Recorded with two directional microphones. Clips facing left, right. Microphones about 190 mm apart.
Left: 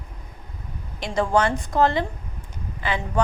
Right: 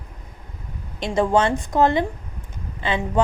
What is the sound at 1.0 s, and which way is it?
A woman's voice, 20° right (ahead or behind).